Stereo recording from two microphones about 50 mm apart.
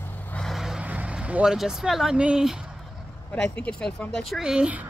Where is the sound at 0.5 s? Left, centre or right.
Centre.